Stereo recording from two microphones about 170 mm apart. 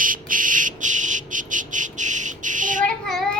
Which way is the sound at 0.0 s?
50° right (ahead or behind).